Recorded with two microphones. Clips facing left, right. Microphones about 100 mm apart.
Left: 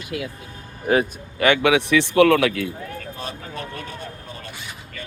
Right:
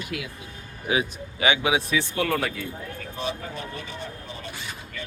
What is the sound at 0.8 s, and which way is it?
Speech, 55° left (ahead or behind).